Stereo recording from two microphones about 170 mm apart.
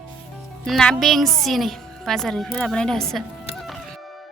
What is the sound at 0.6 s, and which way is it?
A woman's voice, centre (ahead or behind).